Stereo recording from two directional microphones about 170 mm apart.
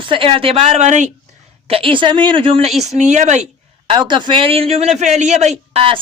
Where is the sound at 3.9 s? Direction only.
30° right (ahead or behind).